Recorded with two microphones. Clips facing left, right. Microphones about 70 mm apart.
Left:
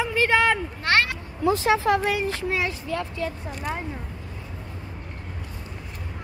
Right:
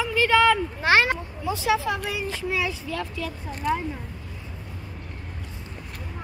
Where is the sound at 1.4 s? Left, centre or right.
Left.